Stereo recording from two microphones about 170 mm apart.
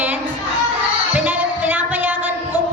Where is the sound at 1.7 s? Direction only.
10° right (ahead or behind).